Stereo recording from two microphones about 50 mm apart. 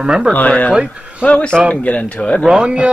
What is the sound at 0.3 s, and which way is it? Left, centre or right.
Speech, left.